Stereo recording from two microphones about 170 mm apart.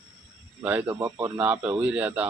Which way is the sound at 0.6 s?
10° right (ahead or behind).